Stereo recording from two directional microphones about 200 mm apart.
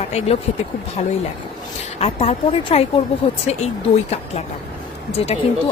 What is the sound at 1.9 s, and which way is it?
Speech, 30° left (ahead or behind).